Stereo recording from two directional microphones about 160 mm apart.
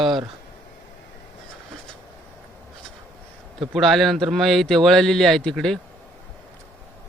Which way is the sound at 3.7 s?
Centre (ahead or behind).